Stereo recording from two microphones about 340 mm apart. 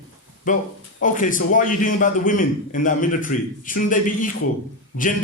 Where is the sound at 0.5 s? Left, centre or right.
Left.